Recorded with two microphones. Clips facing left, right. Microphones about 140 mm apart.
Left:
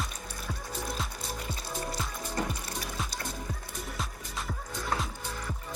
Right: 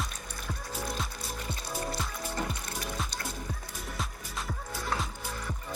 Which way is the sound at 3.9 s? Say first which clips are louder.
Right 2 dB; centre (ahead or behind).